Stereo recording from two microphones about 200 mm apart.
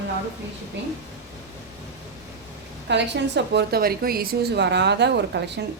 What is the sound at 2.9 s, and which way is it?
A woman's voice, 60° right (ahead or behind).